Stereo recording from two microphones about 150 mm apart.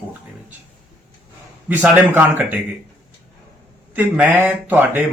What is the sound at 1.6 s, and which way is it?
Speech, 10° right (ahead or behind).